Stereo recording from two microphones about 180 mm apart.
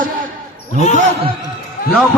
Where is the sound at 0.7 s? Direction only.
40° left (ahead or behind).